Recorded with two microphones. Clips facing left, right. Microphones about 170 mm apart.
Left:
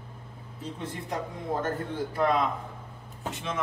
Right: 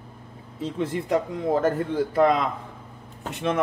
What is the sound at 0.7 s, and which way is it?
A man's voice, 90° right.